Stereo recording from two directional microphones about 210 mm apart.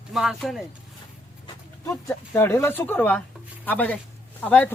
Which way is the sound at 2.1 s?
10° left (ahead or behind).